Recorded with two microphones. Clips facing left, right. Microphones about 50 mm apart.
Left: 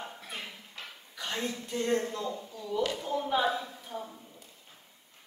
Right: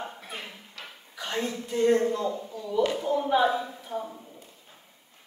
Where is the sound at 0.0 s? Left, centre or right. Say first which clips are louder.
Right 3 dB; centre.